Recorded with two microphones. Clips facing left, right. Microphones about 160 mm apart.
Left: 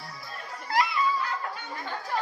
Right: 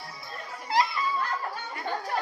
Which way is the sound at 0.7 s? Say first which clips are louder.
Right 1 dB; 20° right (ahead or behind).